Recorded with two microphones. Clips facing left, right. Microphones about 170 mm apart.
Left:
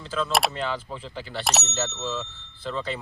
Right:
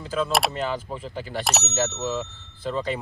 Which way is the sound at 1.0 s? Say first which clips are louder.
Right 3 dB; 45° right (ahead or behind).